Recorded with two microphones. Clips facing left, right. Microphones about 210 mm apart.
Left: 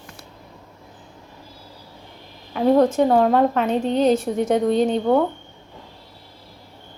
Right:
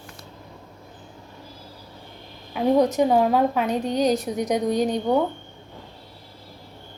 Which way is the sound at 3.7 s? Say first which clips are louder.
Left 4 dB; 25° left (ahead or behind).